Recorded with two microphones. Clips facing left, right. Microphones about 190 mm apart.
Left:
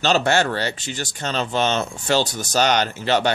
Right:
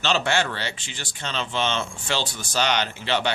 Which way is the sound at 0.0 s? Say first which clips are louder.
Left 5 dB; 40° left (ahead or behind).